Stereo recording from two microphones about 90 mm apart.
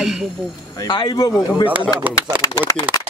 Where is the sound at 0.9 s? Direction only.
60° left (ahead or behind).